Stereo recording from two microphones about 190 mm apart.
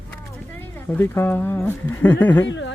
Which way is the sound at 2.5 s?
70° left (ahead or behind).